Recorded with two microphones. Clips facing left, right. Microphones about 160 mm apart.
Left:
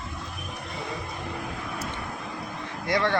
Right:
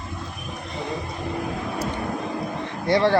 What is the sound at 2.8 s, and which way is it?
Speech, 30° right (ahead or behind).